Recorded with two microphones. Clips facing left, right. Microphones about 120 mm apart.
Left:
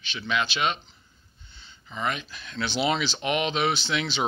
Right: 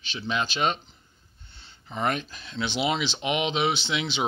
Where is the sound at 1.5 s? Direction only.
60° right (ahead or behind).